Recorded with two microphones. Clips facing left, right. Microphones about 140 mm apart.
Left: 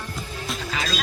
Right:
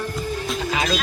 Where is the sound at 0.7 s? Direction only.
20° right (ahead or behind).